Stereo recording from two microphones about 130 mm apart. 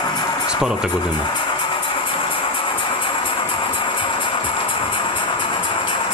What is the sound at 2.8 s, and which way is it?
Music, 40° left (ahead or behind).